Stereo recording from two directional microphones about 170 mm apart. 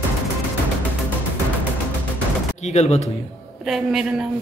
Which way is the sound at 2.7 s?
40° left (ahead or behind).